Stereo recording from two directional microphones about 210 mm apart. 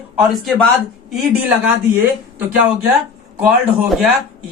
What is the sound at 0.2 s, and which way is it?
Speech, centre (ahead or behind).